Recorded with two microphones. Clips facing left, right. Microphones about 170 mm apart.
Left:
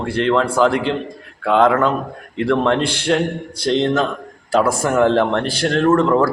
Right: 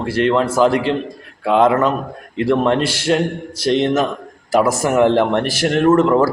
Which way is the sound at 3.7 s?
10° right (ahead or behind).